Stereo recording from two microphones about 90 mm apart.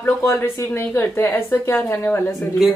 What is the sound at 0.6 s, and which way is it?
A woman's voice, 30° left (ahead or behind).